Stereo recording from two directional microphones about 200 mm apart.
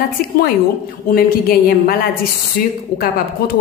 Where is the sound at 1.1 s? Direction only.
50° left (ahead or behind).